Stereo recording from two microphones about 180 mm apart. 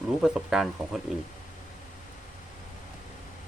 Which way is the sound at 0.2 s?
Centre (ahead or behind).